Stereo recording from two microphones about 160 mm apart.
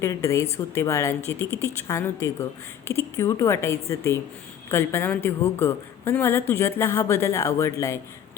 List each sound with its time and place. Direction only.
0.0 s a woman's voice: 20° left (ahead or behind)